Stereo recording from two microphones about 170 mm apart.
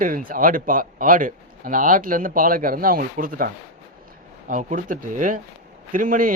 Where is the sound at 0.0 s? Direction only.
55° right (ahead or behind).